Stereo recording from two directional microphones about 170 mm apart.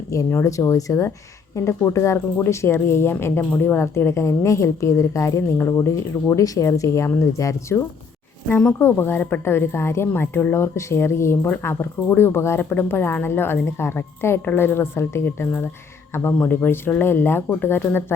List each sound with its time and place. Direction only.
0.1 s a woman's voice: 20° left (ahead or behind)